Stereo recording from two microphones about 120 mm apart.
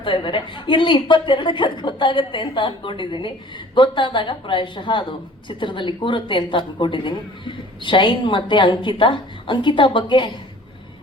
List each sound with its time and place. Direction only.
0.0 s speech: 45° left (ahead or behind)